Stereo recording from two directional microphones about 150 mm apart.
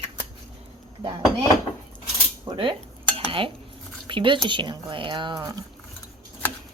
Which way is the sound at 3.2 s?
35° right (ahead or behind).